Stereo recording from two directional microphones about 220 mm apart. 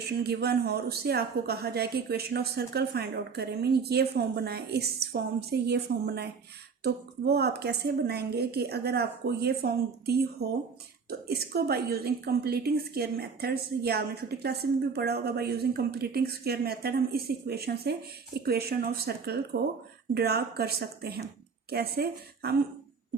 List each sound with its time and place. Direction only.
0.2 s a woman's voice: 45° right (ahead or behind)
11.3 s a woman's voice: 45° right (ahead or behind)